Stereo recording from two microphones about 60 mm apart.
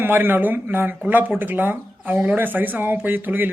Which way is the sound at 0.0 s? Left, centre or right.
Right.